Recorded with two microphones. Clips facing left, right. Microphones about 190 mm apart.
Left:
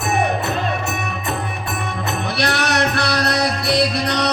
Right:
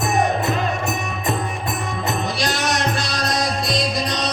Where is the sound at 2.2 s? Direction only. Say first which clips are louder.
Left 2 dB; 65° left (ahead or behind).